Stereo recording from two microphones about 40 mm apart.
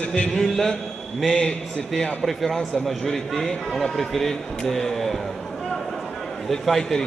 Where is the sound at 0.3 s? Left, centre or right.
Centre.